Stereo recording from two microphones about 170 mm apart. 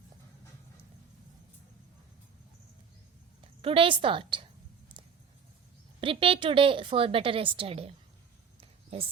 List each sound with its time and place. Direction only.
3.4 s a woman's voice: 30° right (ahead or behind)
6.0 s a woman's voice: 30° right (ahead or behind)
8.6 s a sound: 35° right (ahead or behind)